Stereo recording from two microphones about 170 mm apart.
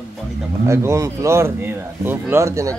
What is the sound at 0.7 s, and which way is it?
Speech, 15° right (ahead or behind).